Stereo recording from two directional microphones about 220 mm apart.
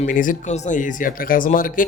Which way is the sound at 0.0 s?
35° left (ahead or behind).